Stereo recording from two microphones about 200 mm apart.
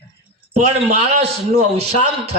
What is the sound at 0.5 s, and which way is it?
Speech, 35° right (ahead or behind).